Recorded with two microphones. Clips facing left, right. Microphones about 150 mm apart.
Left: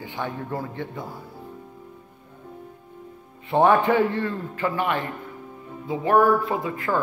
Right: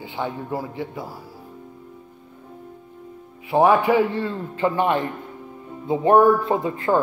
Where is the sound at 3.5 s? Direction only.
5° right (ahead or behind).